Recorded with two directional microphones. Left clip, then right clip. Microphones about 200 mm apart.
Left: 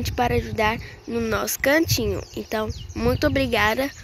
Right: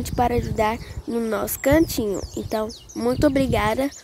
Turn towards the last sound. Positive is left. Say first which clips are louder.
# left 1 dB
turn(degrees=-5)  # may be behind; listen again after turning